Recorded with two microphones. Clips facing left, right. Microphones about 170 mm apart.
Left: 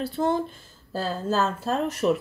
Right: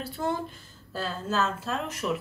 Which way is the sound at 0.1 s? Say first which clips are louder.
Left 5 dB; 25° left (ahead or behind).